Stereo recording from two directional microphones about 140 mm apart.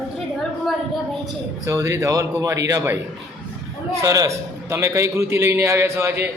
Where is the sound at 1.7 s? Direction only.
20° right (ahead or behind).